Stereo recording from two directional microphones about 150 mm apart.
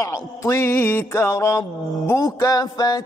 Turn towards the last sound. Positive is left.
turn(degrees=25)  # may be behind; listen again after turning